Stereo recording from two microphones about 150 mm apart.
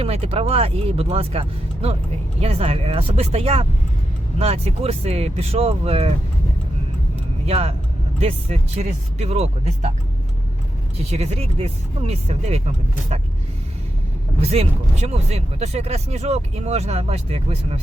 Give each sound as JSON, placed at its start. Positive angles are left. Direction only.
{"t": 0.0, "sound": "speech", "side_deg": -40}
{"t": 7.4, "sound": "speech", "side_deg": -40}
{"t": 11.1, "sound": "speech", "side_deg": -45}
{"t": 14.5, "sound": "speech", "side_deg": -45}